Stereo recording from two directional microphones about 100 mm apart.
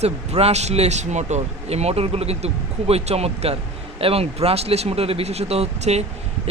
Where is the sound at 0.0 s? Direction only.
90° right.